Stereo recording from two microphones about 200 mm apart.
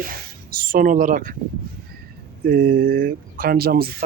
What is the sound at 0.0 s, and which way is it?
Speech, 45° right (ahead or behind).